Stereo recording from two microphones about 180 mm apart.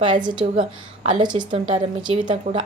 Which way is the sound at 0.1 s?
25° right (ahead or behind).